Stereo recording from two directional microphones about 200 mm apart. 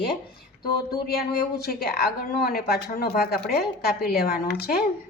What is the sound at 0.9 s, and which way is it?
A woman's voice, 50° left (ahead or behind).